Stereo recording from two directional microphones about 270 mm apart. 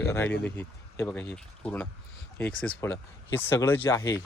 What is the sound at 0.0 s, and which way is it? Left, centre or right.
Speech, centre.